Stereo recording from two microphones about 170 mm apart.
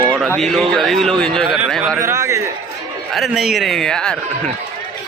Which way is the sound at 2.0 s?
20° right (ahead or behind).